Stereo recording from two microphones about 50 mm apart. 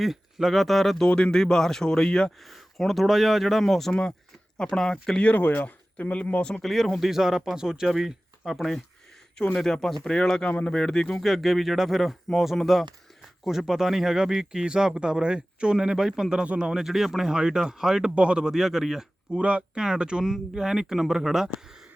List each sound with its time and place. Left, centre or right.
0.0 s speech: centre
1.0 s a man's voice: centre
2.4 s speech: centre
5.2 s speech: left
6.4 s speech: centre
6.7 s a man's voice: centre; by 10.8 s left
10.8 s speech: centre
11.2 s a man's voice: centre
16.4 s speech: centre
16.8 s a man's voice: centre
18.1 s a man's voice: right
19.4 s a man's voice: right